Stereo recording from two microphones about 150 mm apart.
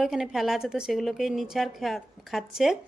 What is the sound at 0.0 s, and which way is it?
A woman's voice, 5° right (ahead or behind).